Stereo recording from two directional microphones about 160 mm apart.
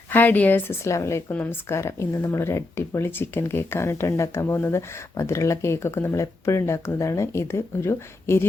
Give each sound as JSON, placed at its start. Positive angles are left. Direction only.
{"t": 0.1, "sound": "a woman's voice", "side_deg": 10}